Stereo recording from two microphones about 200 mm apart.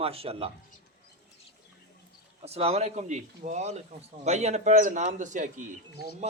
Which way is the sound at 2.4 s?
30° right (ahead or behind).